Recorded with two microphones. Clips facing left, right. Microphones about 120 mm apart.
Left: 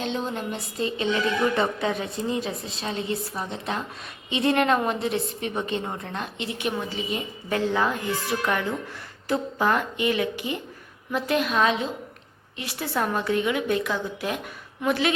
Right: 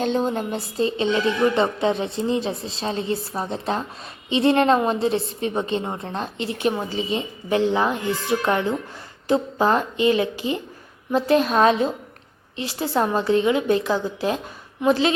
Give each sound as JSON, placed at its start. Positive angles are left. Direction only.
{"t": 0.0, "sound": "a woman's voice", "side_deg": -40}
{"t": 12.5, "sound": "a woman's voice", "side_deg": -25}